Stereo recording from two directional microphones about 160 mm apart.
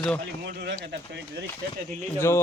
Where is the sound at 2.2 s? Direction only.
15° left (ahead or behind).